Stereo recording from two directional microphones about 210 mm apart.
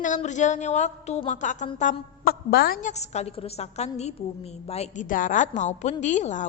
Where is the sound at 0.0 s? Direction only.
35° left (ahead or behind).